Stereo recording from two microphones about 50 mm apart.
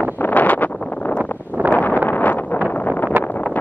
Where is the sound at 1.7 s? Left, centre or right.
Left.